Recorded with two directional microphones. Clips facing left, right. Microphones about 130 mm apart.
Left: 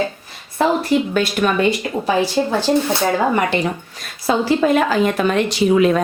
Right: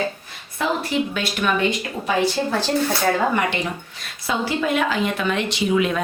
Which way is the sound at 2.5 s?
20° left (ahead or behind).